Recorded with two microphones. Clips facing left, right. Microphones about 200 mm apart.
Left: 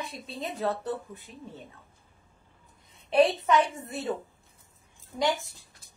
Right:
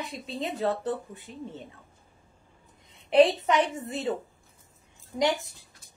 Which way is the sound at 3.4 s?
20° right (ahead or behind).